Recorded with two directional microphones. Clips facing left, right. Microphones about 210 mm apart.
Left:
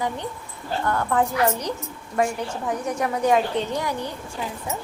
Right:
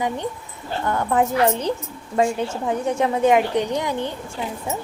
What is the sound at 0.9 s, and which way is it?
Speech, 20° right (ahead or behind).